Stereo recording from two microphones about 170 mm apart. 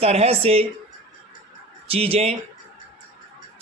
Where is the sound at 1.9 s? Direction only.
35° right (ahead or behind).